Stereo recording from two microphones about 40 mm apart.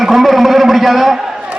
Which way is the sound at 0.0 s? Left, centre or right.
Centre.